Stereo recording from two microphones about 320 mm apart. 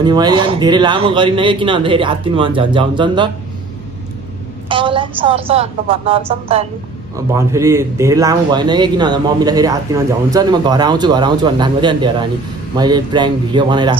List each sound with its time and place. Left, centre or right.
0.0 s speech: centre
4.6 s speech: centre